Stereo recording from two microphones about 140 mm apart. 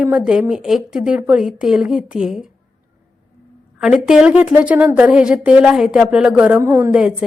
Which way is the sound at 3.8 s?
5° right (ahead or behind).